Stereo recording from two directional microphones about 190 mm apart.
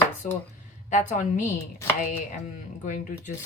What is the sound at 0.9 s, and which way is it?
Speech, 40° left (ahead or behind).